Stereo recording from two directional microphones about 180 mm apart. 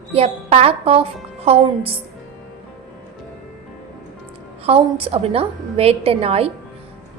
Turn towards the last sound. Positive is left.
turn(degrees=-35)  # may be behind; listen again after turning